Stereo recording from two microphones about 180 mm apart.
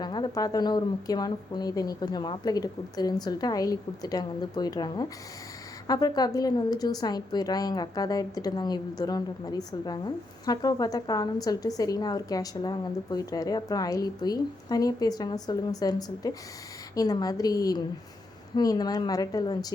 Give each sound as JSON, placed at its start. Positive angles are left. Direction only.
{"t": 0.0, "sound": "a woman's voice", "side_deg": 25}